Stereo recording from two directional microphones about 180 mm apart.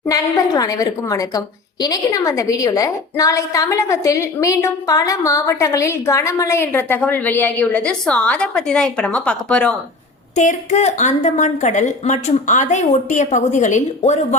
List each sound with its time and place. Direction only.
0.0 s speech: 20° left (ahead or behind)
10.3 s a woman's voice: 40° left (ahead or behind)